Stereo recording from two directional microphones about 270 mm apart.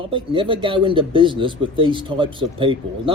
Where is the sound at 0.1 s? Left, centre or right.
Centre.